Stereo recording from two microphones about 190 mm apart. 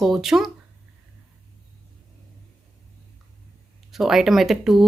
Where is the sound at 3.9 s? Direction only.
Centre (ahead or behind).